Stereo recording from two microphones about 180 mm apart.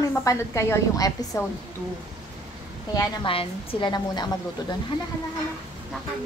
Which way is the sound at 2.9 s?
30° left (ahead or behind).